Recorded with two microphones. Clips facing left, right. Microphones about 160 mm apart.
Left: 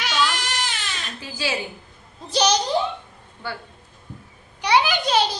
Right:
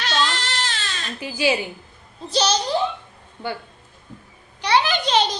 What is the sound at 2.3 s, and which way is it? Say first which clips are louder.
Speech: left 1 dB; 15° left (ahead or behind).